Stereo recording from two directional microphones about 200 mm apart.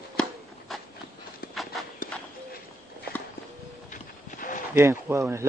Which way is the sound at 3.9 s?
40° left (ahead or behind).